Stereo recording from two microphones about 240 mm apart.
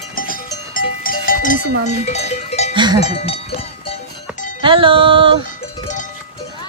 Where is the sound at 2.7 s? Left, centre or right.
Centre.